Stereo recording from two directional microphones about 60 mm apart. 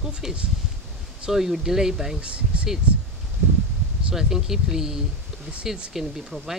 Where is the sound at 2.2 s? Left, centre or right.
Centre.